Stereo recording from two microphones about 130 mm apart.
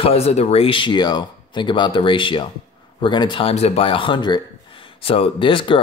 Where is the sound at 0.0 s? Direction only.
50° left (ahead or behind).